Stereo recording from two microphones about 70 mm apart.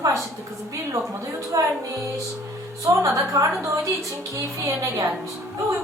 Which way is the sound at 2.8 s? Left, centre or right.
Right.